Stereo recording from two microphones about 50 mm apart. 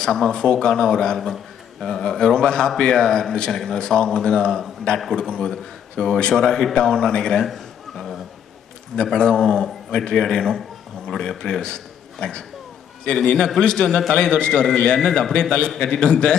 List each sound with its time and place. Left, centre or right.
0.0 s a man's voice: centre
7.4 s a sound: centre
8.9 s a man's voice: centre